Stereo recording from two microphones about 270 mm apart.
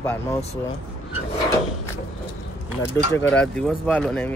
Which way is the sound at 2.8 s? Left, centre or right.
Centre.